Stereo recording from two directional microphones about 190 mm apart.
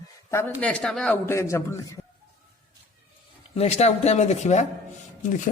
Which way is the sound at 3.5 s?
35° left (ahead or behind).